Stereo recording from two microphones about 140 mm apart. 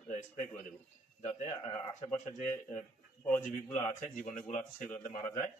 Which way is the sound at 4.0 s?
65° left (ahead or behind).